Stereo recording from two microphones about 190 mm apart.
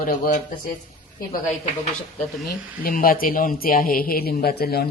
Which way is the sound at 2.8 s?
50° left (ahead or behind).